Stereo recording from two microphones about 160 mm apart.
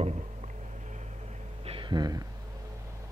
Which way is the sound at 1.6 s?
35° right (ahead or behind).